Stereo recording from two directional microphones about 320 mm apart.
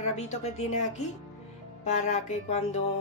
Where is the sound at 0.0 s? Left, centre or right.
Centre.